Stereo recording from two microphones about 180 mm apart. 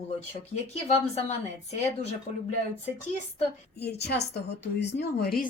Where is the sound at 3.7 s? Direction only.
65° left (ahead or behind).